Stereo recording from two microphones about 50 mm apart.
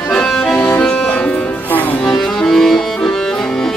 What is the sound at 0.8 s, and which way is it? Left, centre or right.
Music, left.